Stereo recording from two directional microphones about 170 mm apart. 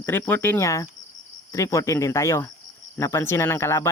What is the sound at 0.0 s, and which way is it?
Speech, 15° left (ahead or behind).